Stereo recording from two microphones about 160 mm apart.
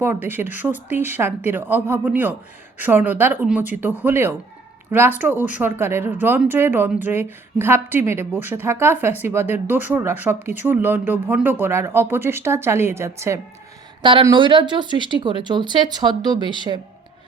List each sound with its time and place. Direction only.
0.0 s speech: 15° right (ahead or behind)
14.0 s speech: 30° right (ahead or behind)